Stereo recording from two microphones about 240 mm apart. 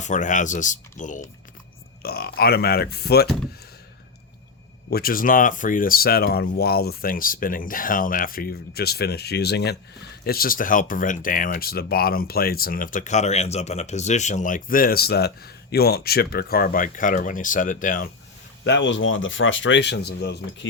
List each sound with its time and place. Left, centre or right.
0.0 s speech: left
4.9 s speech: left
18.6 s speech: left